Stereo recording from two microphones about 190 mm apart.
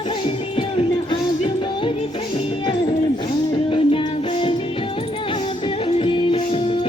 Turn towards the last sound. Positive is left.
turn(degrees=30)  # may be behind; listen again after turning